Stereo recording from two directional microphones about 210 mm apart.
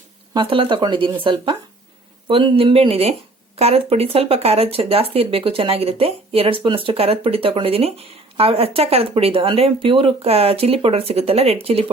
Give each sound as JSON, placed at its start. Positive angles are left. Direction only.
{"t": 0.3, "sound": "speech", "side_deg": -25}